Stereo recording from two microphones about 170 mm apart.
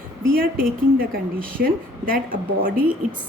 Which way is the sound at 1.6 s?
55° right (ahead or behind).